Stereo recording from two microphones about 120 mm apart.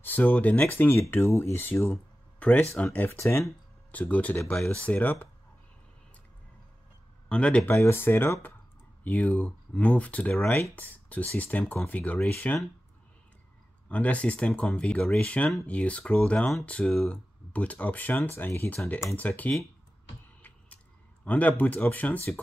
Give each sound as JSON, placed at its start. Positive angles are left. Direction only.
{"t": 0.0, "sound": "speech", "side_deg": 15}
{"t": 4.4, "sound": "speech", "side_deg": 0}
{"t": 4.6, "sound": "speech", "side_deg": 15}
{"t": 7.2, "sound": "speech", "side_deg": 10}
{"t": 7.7, "sound": "speech", "side_deg": 20}
{"t": 13.8, "sound": "speech", "side_deg": 10}
{"t": 20.4, "sound": "a sound", "side_deg": 10}